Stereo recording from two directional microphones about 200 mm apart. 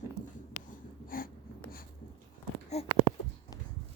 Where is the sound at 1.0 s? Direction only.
45° left (ahead or behind).